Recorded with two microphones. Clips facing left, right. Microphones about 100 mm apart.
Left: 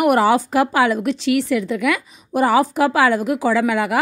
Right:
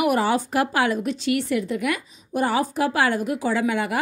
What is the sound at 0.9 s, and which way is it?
A woman's voice, 90° left.